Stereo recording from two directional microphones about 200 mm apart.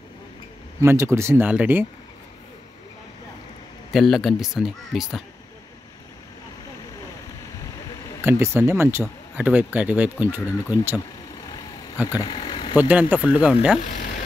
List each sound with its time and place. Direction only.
0.7 s speech: 15° right (ahead or behind)
3.9 s speech: centre (ahead or behind)
8.2 s speech: 10° right (ahead or behind)
12.2 s vehicle: 25° left (ahead or behind)
12.7 s speech: 10° right (ahead or behind)
13.8 s a sound: 40° left (ahead or behind)